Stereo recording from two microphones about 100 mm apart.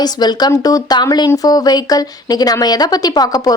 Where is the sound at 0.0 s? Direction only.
45° left (ahead or behind).